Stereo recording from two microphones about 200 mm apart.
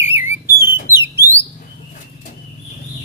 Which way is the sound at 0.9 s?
10° right (ahead or behind).